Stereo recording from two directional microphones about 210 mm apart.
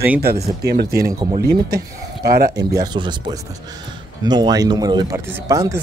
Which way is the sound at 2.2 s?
45° right (ahead or behind).